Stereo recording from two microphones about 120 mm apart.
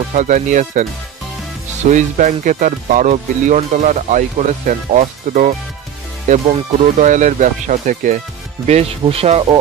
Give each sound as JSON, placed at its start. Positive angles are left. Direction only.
{"t": 0.1, "sound": "speech", "side_deg": -90}
{"t": 8.6, "sound": "speech", "side_deg": -60}